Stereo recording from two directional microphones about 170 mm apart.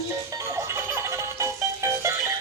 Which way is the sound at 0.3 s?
20° right (ahead or behind).